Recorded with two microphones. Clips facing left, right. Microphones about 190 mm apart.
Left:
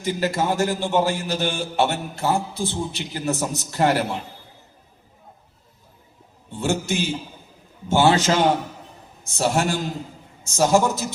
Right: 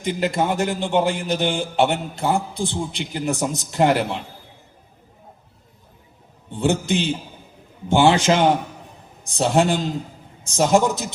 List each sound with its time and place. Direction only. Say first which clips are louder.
0.0 s a man's voice: right 1 dB; 15° right (ahead or behind)
6.5 s a man's voice: right 3 dB; 20° right (ahead or behind)